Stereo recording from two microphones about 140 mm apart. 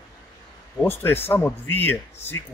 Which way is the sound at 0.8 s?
15° left (ahead or behind).